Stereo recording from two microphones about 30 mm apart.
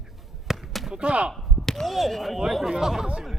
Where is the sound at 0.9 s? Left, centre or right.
Right.